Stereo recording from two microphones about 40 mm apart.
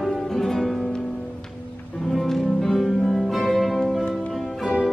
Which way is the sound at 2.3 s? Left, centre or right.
Centre.